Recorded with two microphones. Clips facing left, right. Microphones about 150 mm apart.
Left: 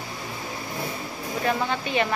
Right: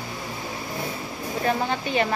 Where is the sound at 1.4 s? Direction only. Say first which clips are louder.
Right 1 dB; 35° right (ahead or behind).